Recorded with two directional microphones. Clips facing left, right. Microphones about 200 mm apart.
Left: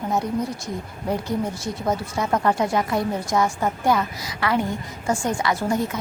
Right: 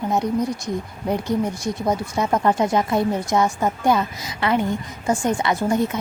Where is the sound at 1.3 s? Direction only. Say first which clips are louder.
Right 3 dB; 15° right (ahead or behind).